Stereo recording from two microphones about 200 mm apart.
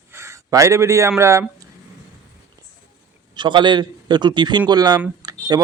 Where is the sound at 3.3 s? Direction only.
25° right (ahead or behind).